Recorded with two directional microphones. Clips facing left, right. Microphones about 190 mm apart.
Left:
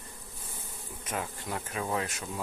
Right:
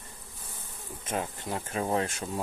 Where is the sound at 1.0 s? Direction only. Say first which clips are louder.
Right 3 dB; 25° right (ahead or behind).